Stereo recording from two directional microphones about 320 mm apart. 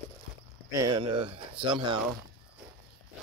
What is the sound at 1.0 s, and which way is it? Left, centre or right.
Speech, centre.